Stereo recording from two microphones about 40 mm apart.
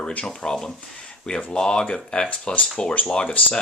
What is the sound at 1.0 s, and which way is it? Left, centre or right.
Speech, left.